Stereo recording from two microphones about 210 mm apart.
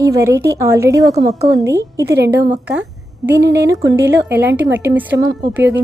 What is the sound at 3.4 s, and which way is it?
Speech, 15° right (ahead or behind).